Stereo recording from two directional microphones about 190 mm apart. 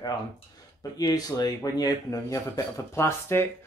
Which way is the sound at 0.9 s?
20° left (ahead or behind).